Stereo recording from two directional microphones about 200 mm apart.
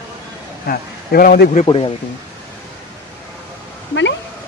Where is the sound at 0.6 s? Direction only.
45° left (ahead or behind).